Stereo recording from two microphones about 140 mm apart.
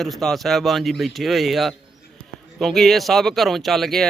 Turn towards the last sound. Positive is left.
turn(degrees=0)  # may be behind; listen again after turning